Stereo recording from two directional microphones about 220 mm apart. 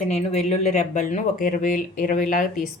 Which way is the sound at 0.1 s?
30° left (ahead or behind).